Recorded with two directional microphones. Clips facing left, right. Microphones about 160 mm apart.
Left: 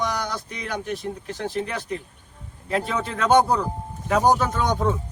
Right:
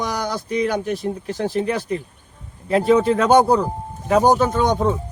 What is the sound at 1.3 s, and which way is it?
Speech, 35° right (ahead or behind).